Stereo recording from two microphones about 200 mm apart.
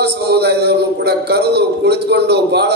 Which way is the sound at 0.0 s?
55° right (ahead or behind).